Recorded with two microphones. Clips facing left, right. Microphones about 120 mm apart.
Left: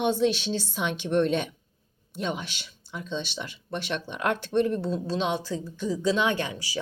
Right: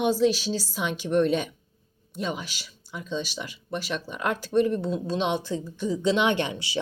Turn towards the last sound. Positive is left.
turn(degrees=-25)  # may be behind; listen again after turning